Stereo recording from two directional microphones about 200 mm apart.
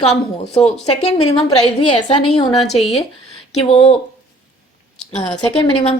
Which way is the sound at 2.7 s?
30° left (ahead or behind).